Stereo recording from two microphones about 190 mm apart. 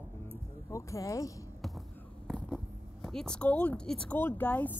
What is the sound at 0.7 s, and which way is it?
Speech, 15° left (ahead or behind).